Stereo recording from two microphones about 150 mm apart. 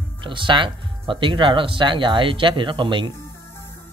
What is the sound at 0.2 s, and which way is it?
Speech, 35° right (ahead or behind).